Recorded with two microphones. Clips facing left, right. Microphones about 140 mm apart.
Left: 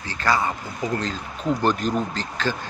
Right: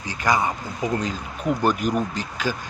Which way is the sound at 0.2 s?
15° right (ahead or behind).